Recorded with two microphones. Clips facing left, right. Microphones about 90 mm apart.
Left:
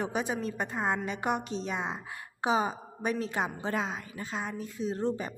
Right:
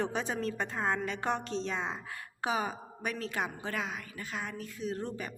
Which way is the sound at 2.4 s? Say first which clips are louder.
Left 5 dB; 20° left (ahead or behind).